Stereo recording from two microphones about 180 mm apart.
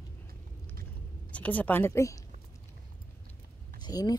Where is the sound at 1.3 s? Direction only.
10° left (ahead or behind).